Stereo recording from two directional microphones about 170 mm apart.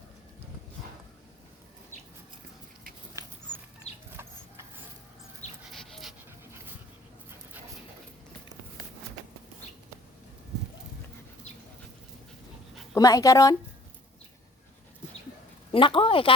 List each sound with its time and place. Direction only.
3.9 s chicken: 40° left (ahead or behind)
5.7 s dog: centre (ahead or behind)
12.9 s speech: 20° left (ahead or behind)
15.7 s a woman's voice: 30° left (ahead or behind)